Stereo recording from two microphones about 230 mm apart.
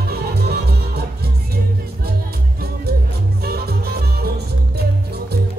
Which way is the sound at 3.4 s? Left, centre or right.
Right.